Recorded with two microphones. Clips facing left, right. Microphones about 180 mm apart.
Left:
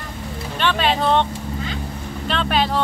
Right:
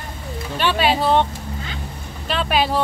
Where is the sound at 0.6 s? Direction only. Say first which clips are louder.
Right 1 dB; 5° right (ahead or behind).